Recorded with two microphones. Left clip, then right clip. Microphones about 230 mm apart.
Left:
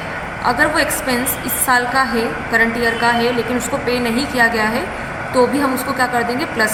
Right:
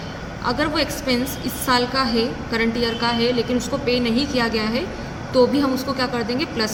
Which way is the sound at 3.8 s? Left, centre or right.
Right.